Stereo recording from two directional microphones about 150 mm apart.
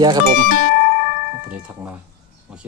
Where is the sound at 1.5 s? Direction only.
10° right (ahead or behind).